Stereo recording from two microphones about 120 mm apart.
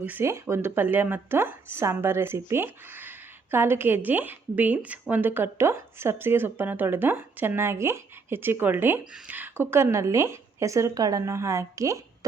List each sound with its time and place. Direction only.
0.0 s a woman's voice: 15° right (ahead or behind)